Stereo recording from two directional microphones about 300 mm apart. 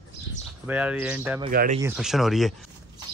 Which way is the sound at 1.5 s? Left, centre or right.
Right.